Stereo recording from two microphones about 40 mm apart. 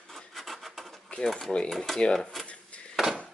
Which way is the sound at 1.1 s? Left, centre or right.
Centre.